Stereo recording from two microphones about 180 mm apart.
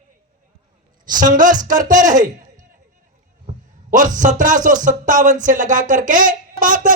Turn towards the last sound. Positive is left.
turn(degrees=-45)  # may be behind; listen again after turning